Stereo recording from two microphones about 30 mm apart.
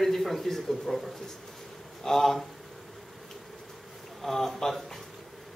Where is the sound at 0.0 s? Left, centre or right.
Centre.